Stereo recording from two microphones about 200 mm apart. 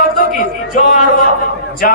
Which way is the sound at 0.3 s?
45° left (ahead or behind).